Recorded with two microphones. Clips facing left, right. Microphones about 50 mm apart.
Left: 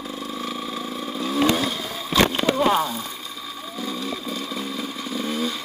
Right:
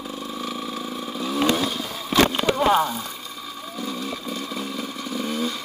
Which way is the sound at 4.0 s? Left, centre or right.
Right.